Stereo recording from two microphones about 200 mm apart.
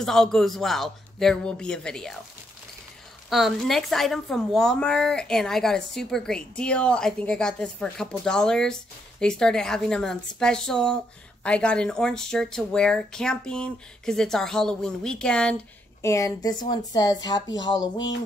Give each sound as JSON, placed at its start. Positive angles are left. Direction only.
{"t": 0.0, "sound": "speech", "side_deg": 0}
{"t": 3.3, "sound": "speech", "side_deg": 0}
{"t": 16.0, "sound": "speech", "side_deg": 15}